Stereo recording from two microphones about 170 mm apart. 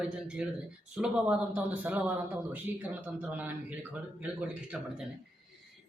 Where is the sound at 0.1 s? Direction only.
5° right (ahead or behind).